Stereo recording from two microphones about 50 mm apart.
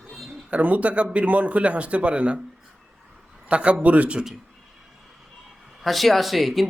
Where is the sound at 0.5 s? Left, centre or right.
Right.